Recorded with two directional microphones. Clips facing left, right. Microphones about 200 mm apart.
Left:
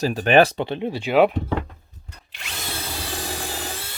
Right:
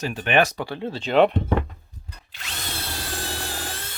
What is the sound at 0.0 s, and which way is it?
Speech, 35° left (ahead or behind).